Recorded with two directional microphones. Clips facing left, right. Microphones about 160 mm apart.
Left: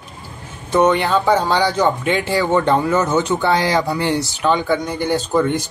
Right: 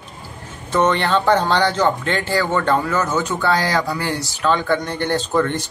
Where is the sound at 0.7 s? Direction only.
10° left (ahead or behind).